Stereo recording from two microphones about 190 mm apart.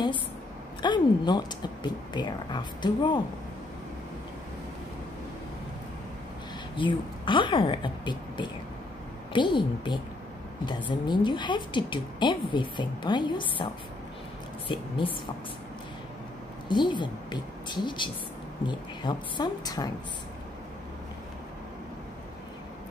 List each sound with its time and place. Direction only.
0.8 s a woman's voice: 25° left (ahead or behind)
6.8 s a woman's voice: 25° left (ahead or behind)
14.7 s a woman's voice: 25° left (ahead or behind)
16.6 s a woman's voice: 25° left (ahead or behind)